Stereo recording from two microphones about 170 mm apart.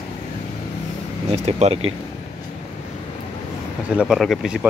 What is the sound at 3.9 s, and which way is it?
Speech, 5° right (ahead or behind).